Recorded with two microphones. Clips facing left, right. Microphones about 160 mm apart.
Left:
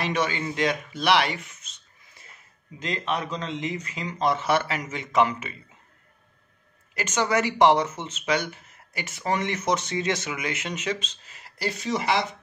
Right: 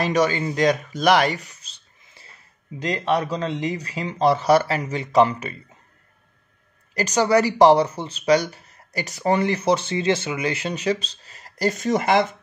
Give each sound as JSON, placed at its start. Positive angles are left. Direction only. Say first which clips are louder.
{"t": 0.0, "sound": "speech", "louder": "right 6 dB", "side_deg": -40}
{"t": 6.9, "sound": "speech", "louder": "right 6 dB", "side_deg": -35}